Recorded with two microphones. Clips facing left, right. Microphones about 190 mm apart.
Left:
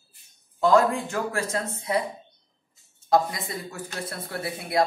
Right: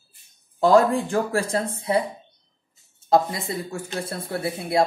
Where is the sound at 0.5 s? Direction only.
30° right (ahead or behind).